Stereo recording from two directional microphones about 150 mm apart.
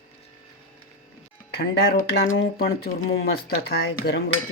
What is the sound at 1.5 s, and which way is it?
Speech, 90° left.